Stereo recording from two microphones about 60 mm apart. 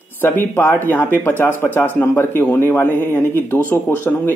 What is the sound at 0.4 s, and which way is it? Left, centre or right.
Speech, left.